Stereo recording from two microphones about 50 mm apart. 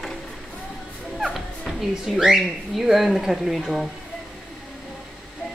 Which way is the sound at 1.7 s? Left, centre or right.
Centre.